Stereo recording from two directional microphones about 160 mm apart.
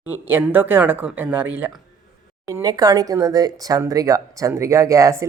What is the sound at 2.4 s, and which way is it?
Speech, 20° right (ahead or behind).